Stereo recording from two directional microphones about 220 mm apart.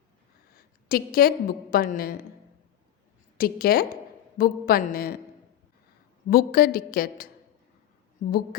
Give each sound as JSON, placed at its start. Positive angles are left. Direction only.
{"t": 0.5, "sound": "a woman's voice", "side_deg": 40}
{"t": 3.3, "sound": "a woman's voice", "side_deg": 40}
{"t": 6.3, "sound": "a woman's voice", "side_deg": 40}